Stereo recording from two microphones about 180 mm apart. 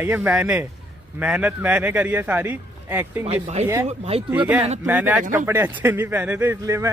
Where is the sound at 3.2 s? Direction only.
35° right (ahead or behind).